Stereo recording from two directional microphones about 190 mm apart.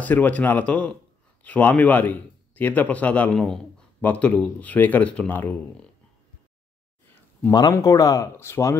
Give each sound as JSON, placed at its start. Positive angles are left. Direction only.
{"t": 0.0, "sound": "a man's voice", "side_deg": 10}
{"t": 7.4, "sound": "a man's voice", "side_deg": 20}